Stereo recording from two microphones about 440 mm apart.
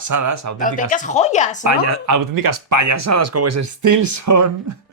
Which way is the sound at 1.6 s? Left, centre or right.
Right.